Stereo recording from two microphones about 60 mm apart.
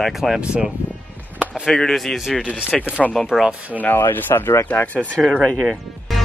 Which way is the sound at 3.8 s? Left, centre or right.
Left.